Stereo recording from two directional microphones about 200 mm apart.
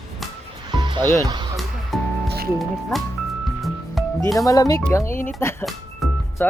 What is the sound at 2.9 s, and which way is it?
Speech, centre (ahead or behind).